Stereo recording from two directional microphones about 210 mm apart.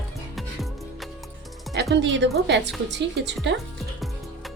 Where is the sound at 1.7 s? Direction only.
55° right (ahead or behind).